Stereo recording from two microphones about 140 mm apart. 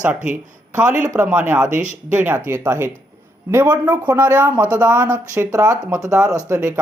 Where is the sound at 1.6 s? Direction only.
65° right (ahead or behind).